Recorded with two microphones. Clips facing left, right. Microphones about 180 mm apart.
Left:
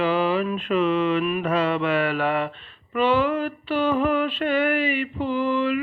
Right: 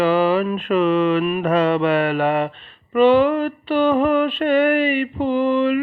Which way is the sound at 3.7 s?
60° right (ahead or behind).